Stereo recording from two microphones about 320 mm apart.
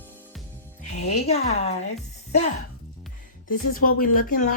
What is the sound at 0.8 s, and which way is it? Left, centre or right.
Speech, left.